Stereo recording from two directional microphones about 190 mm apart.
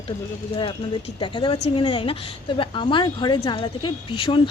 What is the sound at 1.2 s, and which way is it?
A woman's voice, 25° left (ahead or behind).